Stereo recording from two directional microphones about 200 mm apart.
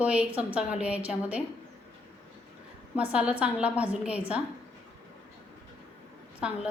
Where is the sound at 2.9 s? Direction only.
5° right (ahead or behind).